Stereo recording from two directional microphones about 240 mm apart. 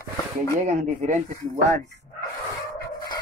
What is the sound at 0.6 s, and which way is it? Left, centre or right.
Speech, right.